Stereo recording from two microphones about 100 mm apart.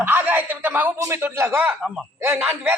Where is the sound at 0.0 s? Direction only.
20° right (ahead or behind).